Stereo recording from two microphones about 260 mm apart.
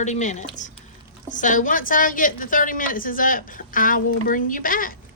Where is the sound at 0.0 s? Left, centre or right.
Left.